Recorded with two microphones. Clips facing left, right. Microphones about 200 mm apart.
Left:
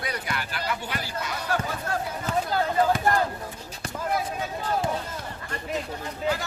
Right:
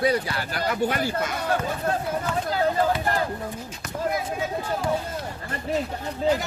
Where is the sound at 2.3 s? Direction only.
40° left (ahead or behind).